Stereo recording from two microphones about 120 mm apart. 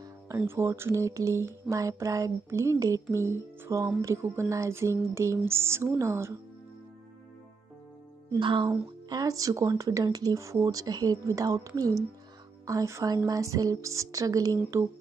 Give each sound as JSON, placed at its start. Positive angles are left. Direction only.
{"t": 0.4, "sound": "speech", "side_deg": -20}
{"t": 8.4, "sound": "speech", "side_deg": -45}
{"t": 9.1, "sound": "speech", "side_deg": -30}